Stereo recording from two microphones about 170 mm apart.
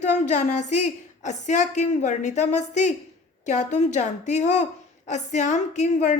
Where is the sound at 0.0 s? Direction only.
45° left (ahead or behind).